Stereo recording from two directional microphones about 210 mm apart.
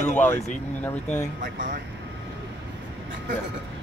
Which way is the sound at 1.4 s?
40° right (ahead or behind).